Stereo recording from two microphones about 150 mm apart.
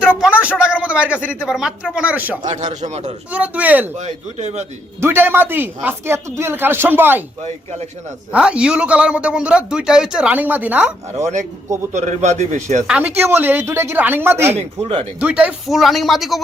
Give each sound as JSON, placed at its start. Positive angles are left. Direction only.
{"t": 0.2, "sound": "a sound", "side_deg": -10}
{"t": 0.6, "sound": "a man's voice", "side_deg": -5}
{"t": 2.4, "sound": "a man's voice", "side_deg": -50}
{"t": 3.3, "sound": "speech", "side_deg": -10}
{"t": 4.0, "sound": "a man's voice", "side_deg": -50}
{"t": 4.9, "sound": "speech", "side_deg": -15}
{"t": 7.4, "sound": "a man's voice", "side_deg": -45}
{"t": 8.3, "sound": "speech", "side_deg": -5}
{"t": 11.2, "sound": "a man's voice", "side_deg": -50}
{"t": 12.9, "sound": "speech", "side_deg": -10}
{"t": 14.5, "sound": "speech", "side_deg": -40}
{"t": 15.2, "sound": "speech", "side_deg": -10}